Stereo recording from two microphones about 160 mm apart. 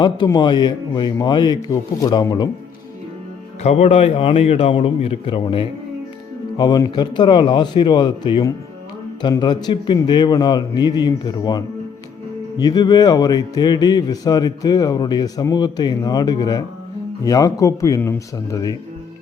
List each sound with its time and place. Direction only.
0.0 s speech: 30° left (ahead or behind)
3.6 s a man's voice: 40° left (ahead or behind); by 18.8 s 20° left (ahead or behind)